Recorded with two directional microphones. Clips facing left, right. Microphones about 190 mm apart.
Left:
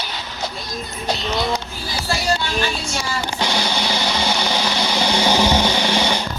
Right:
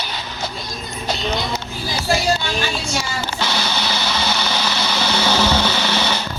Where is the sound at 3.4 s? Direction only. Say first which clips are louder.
Left 1 dB; 15° left (ahead or behind).